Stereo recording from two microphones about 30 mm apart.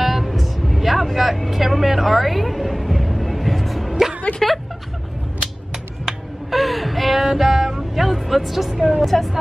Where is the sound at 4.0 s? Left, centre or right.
Centre.